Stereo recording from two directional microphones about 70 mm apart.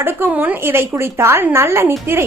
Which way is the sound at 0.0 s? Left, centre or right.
Right.